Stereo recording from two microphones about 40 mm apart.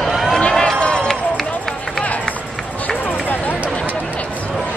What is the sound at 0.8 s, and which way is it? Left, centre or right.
Run, left.